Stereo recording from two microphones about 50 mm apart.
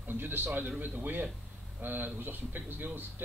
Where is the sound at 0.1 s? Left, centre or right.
Right.